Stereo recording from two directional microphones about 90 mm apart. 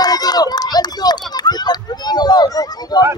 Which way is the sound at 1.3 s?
50° left (ahead or behind).